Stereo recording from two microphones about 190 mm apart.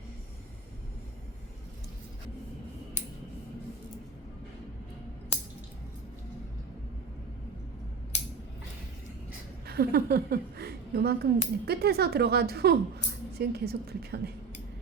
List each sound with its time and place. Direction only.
9.6 s speech: 55° right (ahead or behind)